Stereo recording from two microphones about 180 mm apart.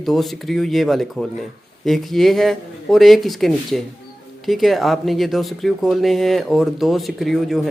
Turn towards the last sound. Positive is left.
turn(degrees=0)  # may be behind; listen again after turning